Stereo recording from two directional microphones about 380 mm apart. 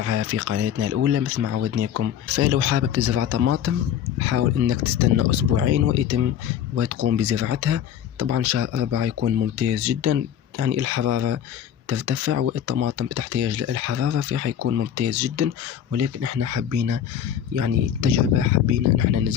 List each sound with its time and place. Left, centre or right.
0.0 s speech: right